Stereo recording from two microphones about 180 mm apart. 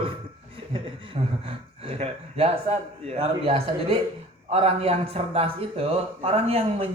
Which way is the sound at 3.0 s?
35° right (ahead or behind).